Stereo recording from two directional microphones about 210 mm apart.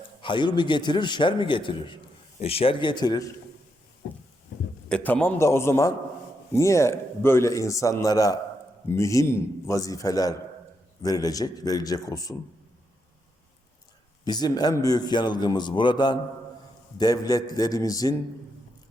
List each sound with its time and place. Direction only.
0.2 s a man's voice: 20° left (ahead or behind)
4.9 s speech: 5° left (ahead or behind)
14.3 s a man's voice: 20° left (ahead or behind)